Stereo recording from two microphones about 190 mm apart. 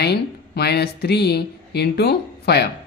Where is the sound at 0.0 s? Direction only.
60° left (ahead or behind).